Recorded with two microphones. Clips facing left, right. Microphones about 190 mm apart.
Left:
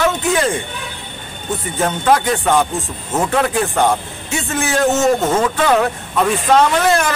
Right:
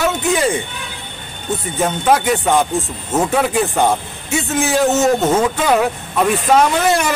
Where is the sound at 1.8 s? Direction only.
5° right (ahead or behind).